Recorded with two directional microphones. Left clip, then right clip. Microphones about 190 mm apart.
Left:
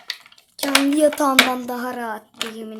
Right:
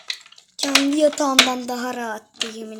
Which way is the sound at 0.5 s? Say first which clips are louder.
Even; centre (ahead or behind).